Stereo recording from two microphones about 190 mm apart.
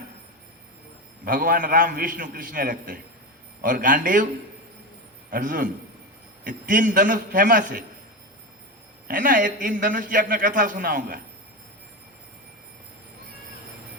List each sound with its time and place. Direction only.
1.2 s a man's voice: 45° right (ahead or behind)
5.3 s a man's voice: 45° right (ahead or behind)
9.0 s a man's voice: 45° right (ahead or behind)